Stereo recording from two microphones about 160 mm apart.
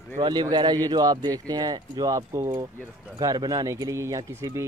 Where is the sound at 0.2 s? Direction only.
25° right (ahead or behind).